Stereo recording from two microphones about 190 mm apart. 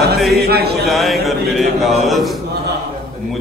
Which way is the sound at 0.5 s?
55° right (ahead or behind).